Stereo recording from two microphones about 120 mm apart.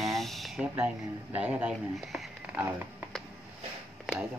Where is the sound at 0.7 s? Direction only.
10° right (ahead or behind).